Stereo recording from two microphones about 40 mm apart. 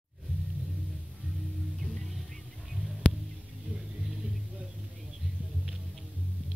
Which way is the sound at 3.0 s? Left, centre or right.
Left.